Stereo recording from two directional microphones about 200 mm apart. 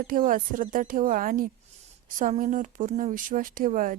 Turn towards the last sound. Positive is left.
turn(degrees=-40)  # may be behind; listen again after turning